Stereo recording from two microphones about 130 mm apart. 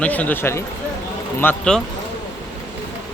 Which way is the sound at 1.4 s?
5° left (ahead or behind).